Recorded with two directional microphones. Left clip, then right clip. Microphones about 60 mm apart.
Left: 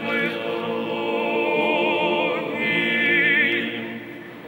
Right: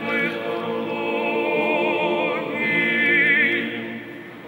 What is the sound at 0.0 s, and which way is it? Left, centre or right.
Music, right.